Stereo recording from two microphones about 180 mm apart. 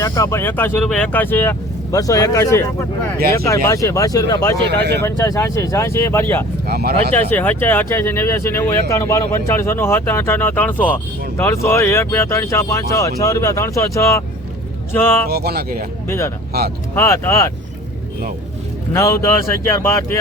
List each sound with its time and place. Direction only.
0.0 s speech: 15° left (ahead or behind)
4.8 s speech: 70° right (ahead or behind)
5.0 s speech: 15° left (ahead or behind)
6.7 s speech: 60° right (ahead or behind)
7.1 s speech: 10° left (ahead or behind)
15.3 s speech: 60° right (ahead or behind)
16.0 s speech: 15° left (ahead or behind)
16.5 s speech: 60° right (ahead or behind)
16.9 s speech: 15° left (ahead or behind)
18.9 s speech: 15° left (ahead or behind)